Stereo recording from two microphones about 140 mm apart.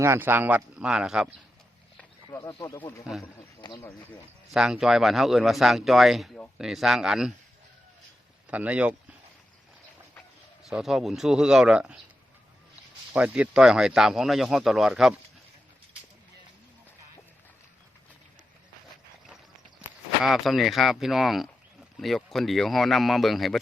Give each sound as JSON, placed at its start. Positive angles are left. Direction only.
{"t": 0.0, "sound": "speech", "side_deg": -15}
{"t": 2.5, "sound": "speech", "side_deg": 25}
{"t": 2.7, "sound": "speech", "side_deg": 15}
{"t": 4.5, "sound": "speech", "side_deg": -5}
{"t": 8.4, "sound": "speech", "side_deg": -10}
{"t": 10.6, "sound": "speech", "side_deg": -5}
{"t": 13.1, "sound": "speech", "side_deg": -10}
{"t": 20.2, "sound": "speech", "side_deg": 0}